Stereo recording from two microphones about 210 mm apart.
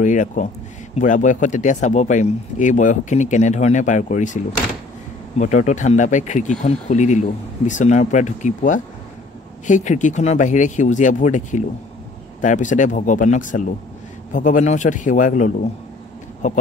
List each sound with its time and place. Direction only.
0.0 s speech: 35° left (ahead or behind)
5.4 s speech: 35° left (ahead or behind)